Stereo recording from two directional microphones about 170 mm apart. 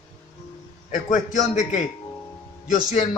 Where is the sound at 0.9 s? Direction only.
50° left (ahead or behind).